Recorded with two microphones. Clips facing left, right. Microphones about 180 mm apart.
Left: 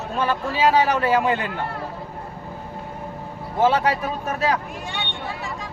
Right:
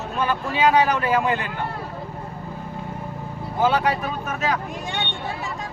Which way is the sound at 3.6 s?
25° left (ahead or behind).